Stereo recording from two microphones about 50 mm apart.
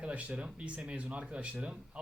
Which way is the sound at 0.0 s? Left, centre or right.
Right.